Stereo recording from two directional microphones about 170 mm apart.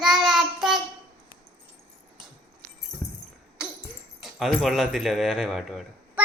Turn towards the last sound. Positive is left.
turn(degrees=0)  # may be behind; listen again after turning